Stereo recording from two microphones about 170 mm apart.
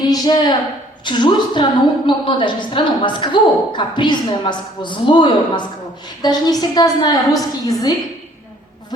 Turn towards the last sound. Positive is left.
turn(degrees=20)  # may be behind; listen again after turning